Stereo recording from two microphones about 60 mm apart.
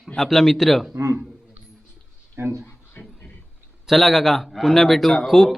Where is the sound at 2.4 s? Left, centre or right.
Right.